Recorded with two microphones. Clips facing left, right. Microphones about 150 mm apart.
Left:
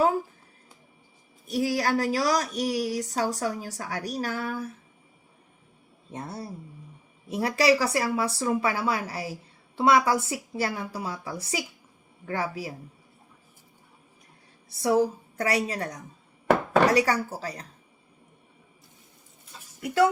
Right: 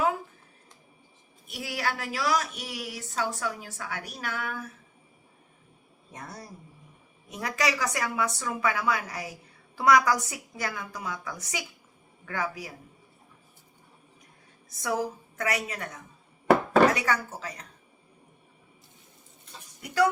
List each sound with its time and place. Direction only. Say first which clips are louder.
1.5 s speech: left 7 dB; 40° left (ahead or behind)
6.1 s speech: left 6 dB; 30° left (ahead or behind)
14.7 s speech: left 7 dB; 30° left (ahead or behind)
19.8 s speech: left 3 dB; 25° left (ahead or behind)